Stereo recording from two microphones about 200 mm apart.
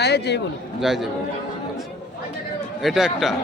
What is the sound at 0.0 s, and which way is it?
Speech, 55° left (ahead or behind).